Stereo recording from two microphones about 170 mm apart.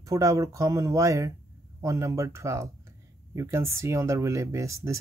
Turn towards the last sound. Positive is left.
turn(degrees=-15)  # may be behind; listen again after turning